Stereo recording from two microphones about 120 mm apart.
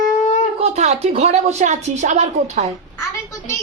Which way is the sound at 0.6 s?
65° right (ahead or behind).